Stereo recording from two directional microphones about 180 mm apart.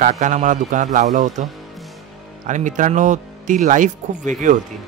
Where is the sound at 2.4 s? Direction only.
45° right (ahead or behind).